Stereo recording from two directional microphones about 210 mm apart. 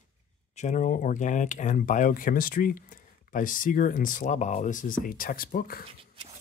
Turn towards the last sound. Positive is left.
turn(degrees=45)  # may be behind; listen again after turning